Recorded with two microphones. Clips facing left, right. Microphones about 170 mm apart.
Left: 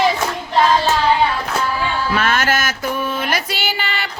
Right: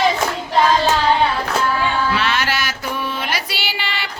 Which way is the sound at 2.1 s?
50° left (ahead or behind).